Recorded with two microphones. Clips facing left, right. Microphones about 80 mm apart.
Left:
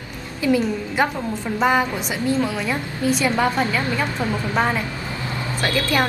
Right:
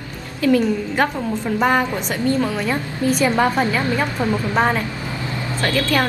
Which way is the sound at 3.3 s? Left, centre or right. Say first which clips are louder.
Right 2 dB; centre.